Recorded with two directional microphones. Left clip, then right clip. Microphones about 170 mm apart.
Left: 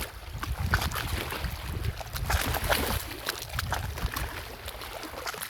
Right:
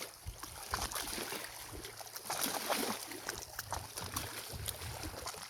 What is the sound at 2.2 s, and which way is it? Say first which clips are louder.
Boat: left 8 dB; 50° left (ahead or behind).